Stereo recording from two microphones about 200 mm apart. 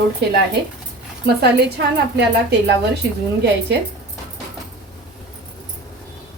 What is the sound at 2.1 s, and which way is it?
Speech, 55° right (ahead or behind).